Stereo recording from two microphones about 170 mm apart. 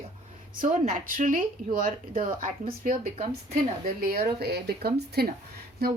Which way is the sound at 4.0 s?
65° right (ahead or behind).